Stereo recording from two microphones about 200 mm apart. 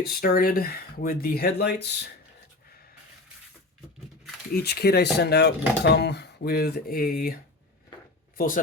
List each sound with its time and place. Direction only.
0.0 s speech: 50° left (ahead or behind)
4.5 s speech: 55° left (ahead or behind)
8.4 s speech: 40° left (ahead or behind)